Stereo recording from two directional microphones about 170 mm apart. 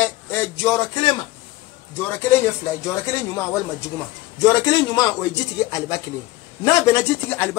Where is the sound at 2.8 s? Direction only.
15° left (ahead or behind).